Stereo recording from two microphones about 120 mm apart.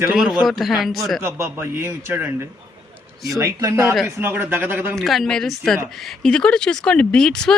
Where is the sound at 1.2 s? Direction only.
20° right (ahead or behind).